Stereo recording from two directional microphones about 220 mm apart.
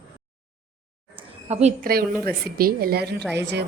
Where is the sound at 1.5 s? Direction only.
30° right (ahead or behind).